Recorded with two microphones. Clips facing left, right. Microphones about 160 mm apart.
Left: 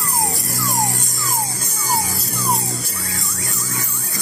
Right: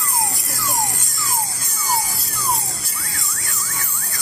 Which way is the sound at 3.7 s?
20° left (ahead or behind).